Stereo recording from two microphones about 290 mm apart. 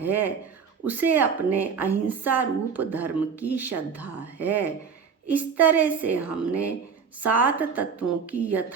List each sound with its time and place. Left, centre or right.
0.0 s a woman's voice: centre